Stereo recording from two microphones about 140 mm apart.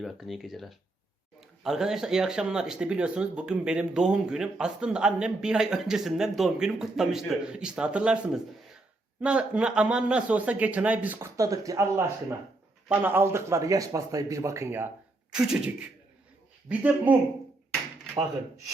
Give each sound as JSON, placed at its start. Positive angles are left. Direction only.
{"t": 0.0, "sound": "speech", "side_deg": 0}
{"t": 11.3, "sound": "speech", "side_deg": -25}
{"t": 15.3, "sound": "speech", "side_deg": -5}